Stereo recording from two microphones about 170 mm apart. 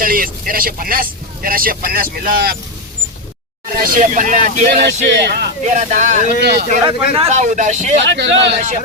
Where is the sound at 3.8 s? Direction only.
50° right (ahead or behind).